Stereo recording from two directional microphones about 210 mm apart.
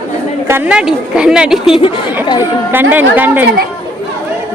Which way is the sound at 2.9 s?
10° right (ahead or behind).